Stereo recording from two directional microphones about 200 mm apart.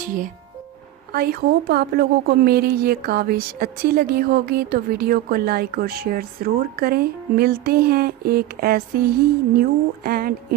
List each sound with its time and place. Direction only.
0.0 s a woman's voice: 40° right (ahead or behind)